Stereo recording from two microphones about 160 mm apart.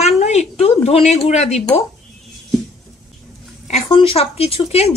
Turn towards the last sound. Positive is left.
turn(degrees=40)  # may be behind; listen again after turning